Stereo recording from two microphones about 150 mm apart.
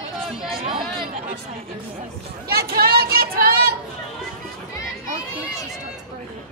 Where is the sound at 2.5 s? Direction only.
90° right.